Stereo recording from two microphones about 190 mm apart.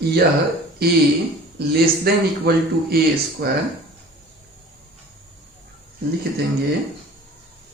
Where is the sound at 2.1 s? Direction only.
55° right (ahead or behind).